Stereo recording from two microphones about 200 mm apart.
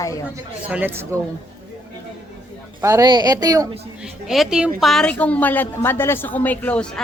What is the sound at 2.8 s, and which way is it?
Speech, 15° right (ahead or behind).